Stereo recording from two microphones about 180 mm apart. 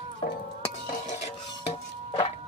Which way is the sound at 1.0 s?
40° left (ahead or behind).